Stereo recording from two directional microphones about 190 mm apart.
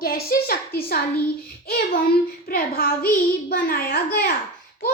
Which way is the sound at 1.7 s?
55° left (ahead or behind).